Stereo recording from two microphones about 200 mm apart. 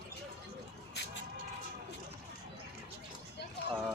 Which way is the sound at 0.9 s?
55° left (ahead or behind).